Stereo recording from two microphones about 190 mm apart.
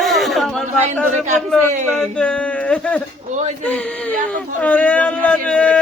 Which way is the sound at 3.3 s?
40° right (ahead or behind).